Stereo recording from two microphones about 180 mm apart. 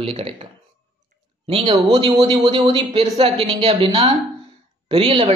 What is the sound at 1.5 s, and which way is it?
Speech, 25° right (ahead or behind).